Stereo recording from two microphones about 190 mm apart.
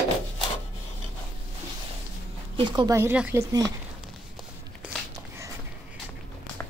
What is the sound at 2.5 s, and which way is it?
A woman's voice, 25° right (ahead or behind).